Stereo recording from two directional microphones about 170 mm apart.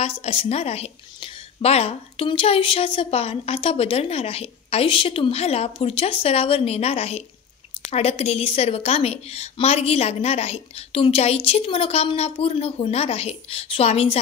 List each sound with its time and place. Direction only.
0.2 s a woman's voice: 35° left (ahead or behind)